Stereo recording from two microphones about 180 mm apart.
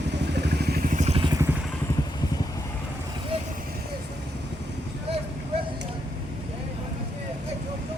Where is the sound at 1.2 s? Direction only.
20° right (ahead or behind).